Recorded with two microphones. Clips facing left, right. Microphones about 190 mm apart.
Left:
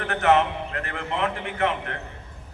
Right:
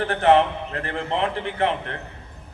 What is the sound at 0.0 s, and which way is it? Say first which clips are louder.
A man's voice: right 3 dB; 30° right (ahead or behind).